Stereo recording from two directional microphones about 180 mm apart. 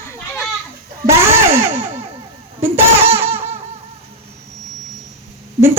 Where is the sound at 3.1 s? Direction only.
10° right (ahead or behind).